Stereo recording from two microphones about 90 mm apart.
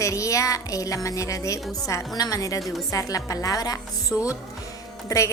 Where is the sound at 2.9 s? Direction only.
40° left (ahead or behind).